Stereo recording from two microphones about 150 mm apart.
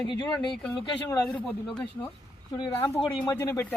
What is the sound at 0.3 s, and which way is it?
Speech, 5° left (ahead or behind).